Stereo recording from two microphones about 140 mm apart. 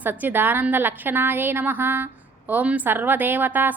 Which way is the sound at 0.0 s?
15° right (ahead or behind).